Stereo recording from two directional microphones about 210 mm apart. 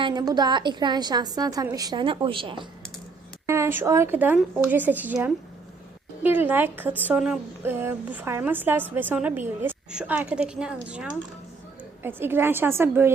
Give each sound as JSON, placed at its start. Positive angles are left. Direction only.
{"t": 0.0, "sound": "a woman's voice", "side_deg": -20}
{"t": 3.4, "sound": "a woman's voice", "side_deg": -10}